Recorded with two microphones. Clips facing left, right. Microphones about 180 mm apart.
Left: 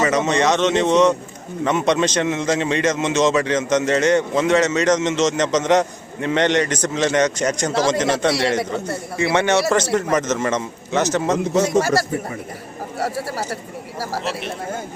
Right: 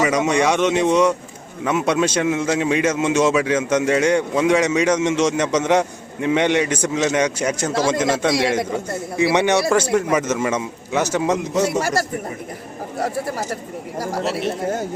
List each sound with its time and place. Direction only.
0.0 s a man's voice: 10° right (ahead or behind)